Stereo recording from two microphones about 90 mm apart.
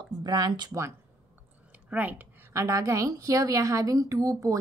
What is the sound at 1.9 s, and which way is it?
Speech, 20° right (ahead or behind).